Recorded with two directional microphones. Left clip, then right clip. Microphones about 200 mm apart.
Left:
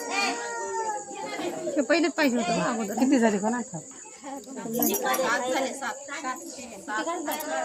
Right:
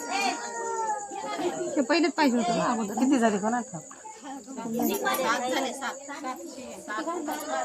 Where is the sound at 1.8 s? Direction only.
15° right (ahead or behind).